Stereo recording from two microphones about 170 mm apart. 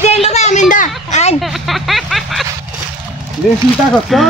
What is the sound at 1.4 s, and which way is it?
Speech, centre (ahead or behind).